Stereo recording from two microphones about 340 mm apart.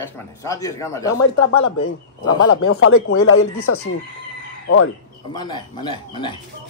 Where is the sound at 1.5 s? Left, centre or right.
Left.